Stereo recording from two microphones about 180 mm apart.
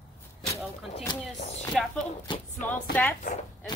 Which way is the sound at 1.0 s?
35° left (ahead or behind).